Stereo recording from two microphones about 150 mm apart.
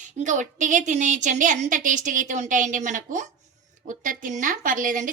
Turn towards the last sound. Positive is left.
turn(degrees=-60)  # may be behind; listen again after turning